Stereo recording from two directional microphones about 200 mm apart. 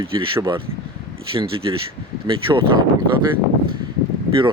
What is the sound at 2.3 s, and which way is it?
Speech, 20° right (ahead or behind).